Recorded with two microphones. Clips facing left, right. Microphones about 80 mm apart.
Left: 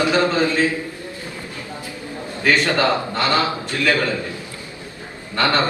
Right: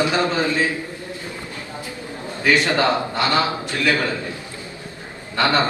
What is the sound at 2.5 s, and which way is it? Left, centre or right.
Speech, centre.